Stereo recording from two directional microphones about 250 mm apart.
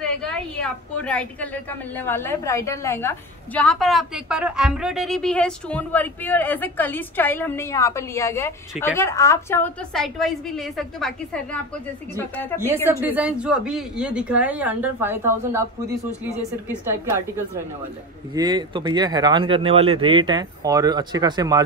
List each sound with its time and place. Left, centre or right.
0.0 s a woman's voice: centre
12.5 s speech: centre
18.3 s speech: centre